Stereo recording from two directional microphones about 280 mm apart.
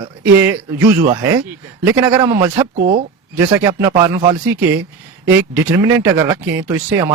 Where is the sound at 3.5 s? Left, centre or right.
Centre.